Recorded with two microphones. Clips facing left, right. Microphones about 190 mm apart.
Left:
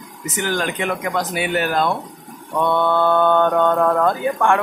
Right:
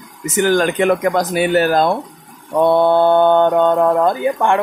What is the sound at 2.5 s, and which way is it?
Mantra, 35° right (ahead or behind).